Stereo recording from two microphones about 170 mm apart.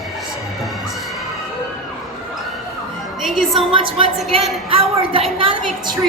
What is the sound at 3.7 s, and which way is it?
A woman's voice, 30° right (ahead or behind).